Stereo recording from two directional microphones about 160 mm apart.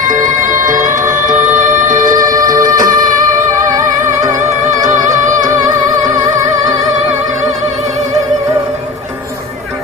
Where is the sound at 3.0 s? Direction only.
55° right (ahead or behind).